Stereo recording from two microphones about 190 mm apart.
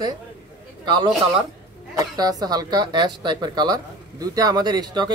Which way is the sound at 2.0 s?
20° right (ahead or behind).